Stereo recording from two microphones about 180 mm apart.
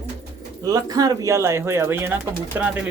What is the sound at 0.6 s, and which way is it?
Speech, 20° right (ahead or behind).